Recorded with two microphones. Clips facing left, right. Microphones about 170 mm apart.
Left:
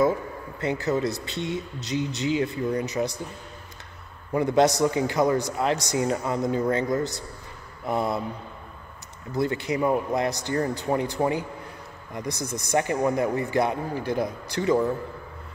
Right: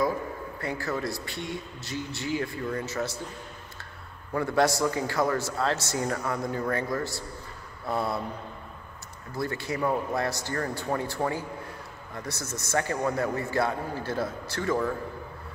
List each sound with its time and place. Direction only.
0.6 s a man's voice: 20° left (ahead or behind)
4.3 s a man's voice: 20° left (ahead or behind)
7.8 s a sound: 20° left (ahead or behind)
9.3 s a man's voice: 20° left (ahead or behind)